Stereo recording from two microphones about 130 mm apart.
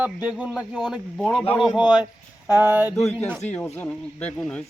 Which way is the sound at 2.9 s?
15° left (ahead or behind).